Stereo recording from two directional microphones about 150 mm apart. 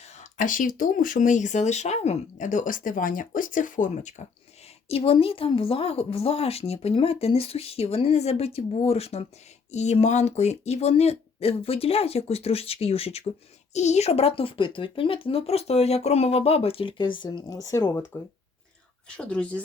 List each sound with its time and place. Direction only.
0.0 s speech: 55° left (ahead or behind)
4.9 s speech: 40° left (ahead or behind); by 19.6 s 10° left (ahead or behind)